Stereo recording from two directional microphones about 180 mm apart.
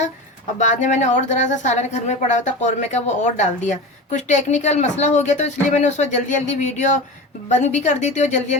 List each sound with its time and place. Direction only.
0.6 s a woman's voice: 40° left (ahead or behind)